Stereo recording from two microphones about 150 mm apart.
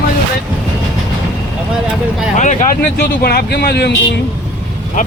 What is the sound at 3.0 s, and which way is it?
Speech, 90° left.